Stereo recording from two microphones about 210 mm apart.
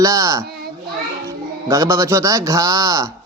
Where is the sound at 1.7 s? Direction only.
15° right (ahead or behind).